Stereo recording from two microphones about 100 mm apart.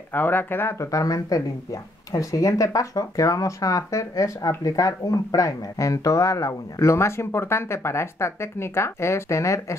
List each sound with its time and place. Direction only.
0.1 s speech: 20° left (ahead or behind)